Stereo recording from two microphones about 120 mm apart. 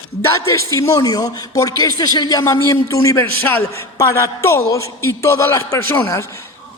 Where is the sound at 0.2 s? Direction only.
25° left (ahead or behind).